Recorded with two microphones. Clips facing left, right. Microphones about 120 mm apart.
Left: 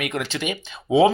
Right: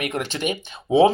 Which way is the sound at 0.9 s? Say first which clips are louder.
Right 1 dB; 10° left (ahead or behind).